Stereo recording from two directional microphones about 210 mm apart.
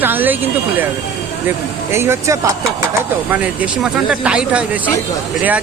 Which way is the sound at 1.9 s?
10° right (ahead or behind).